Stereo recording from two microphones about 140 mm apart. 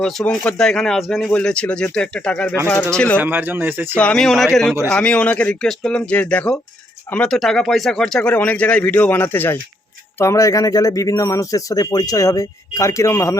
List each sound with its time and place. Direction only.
0.0 s speech: 5° left (ahead or behind)
3.2 s speech: 15° right (ahead or behind)
3.9 s speech: 5° left (ahead or behind)